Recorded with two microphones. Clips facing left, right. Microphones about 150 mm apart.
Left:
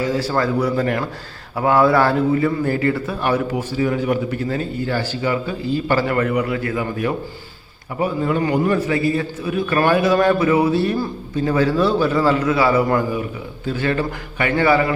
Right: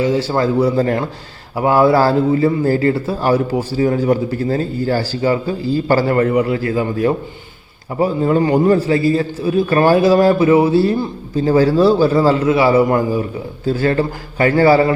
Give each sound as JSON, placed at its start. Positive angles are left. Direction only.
{"t": 0.0, "sound": "a man's voice", "side_deg": -25}